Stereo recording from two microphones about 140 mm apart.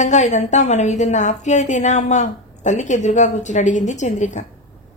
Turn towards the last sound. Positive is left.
turn(degrees=60)  # may be behind; listen again after turning